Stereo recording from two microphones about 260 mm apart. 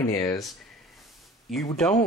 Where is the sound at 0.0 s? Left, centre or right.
Centre.